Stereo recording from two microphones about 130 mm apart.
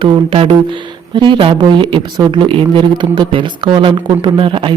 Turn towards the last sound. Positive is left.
turn(degrees=-40)  # may be behind; listen again after turning